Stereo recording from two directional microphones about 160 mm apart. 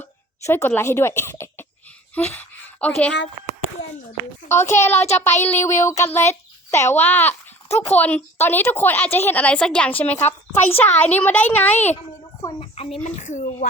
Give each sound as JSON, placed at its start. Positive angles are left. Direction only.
{"t": 0.0, "sound": "speech", "side_deg": 15}
{"t": 4.2, "sound": "a woman's voice", "side_deg": 15}
{"t": 12.4, "sound": "a child's voice", "side_deg": 25}
{"t": 12.7, "sound": "speech", "side_deg": 40}